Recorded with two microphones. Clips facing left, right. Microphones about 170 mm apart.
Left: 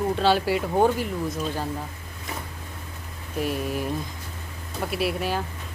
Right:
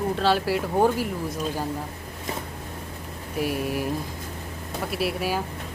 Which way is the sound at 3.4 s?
10° right (ahead or behind).